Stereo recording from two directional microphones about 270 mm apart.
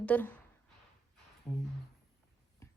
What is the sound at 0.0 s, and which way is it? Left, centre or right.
Speech, centre.